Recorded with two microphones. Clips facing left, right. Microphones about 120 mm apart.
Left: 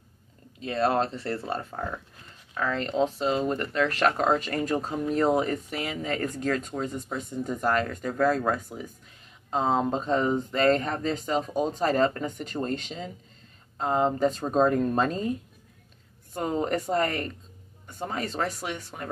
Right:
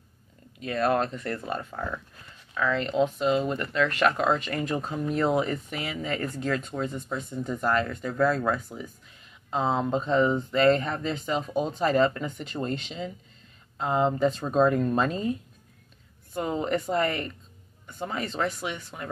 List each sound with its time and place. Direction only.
0.6 s speech: 30° left (ahead or behind)
16.3 s speech: 45° left (ahead or behind)